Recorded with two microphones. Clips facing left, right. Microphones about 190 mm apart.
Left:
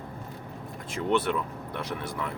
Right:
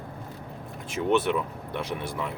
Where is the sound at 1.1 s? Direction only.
20° right (ahead or behind).